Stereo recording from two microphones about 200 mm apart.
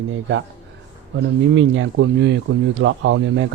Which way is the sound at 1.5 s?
70° right (ahead or behind).